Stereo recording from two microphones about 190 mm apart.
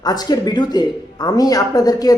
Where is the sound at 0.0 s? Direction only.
20° left (ahead or behind).